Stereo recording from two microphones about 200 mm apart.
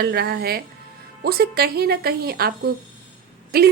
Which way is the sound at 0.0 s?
55° right (ahead or behind).